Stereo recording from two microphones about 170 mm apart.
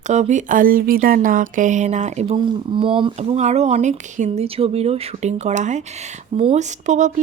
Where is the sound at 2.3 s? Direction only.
30° right (ahead or behind).